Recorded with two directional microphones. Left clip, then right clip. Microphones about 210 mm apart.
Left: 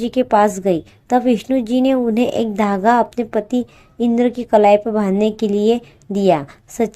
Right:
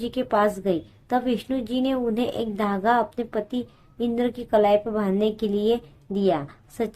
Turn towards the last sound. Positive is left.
turn(degrees=35)  # may be behind; listen again after turning